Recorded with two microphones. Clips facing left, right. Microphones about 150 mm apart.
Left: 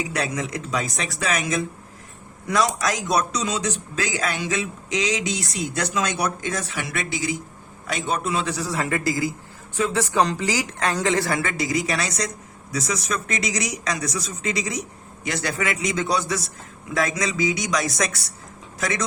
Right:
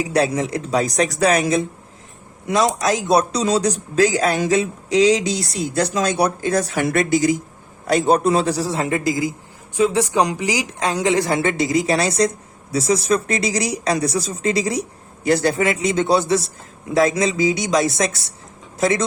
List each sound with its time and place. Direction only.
0.0 s a woman's voice: 35° right (ahead or behind)